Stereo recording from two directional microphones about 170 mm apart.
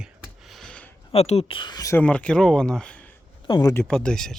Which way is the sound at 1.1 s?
35° left (ahead or behind).